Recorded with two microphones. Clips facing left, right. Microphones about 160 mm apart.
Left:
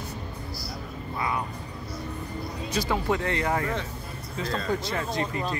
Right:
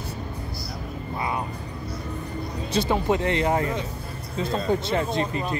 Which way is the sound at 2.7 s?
25° right (ahead or behind).